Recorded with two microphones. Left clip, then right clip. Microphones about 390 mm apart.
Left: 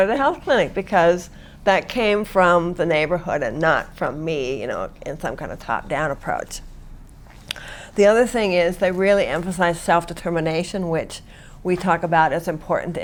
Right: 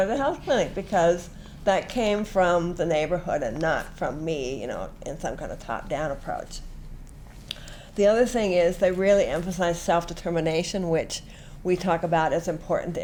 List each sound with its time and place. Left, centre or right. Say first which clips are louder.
0.0 s speech: left 6 dB; left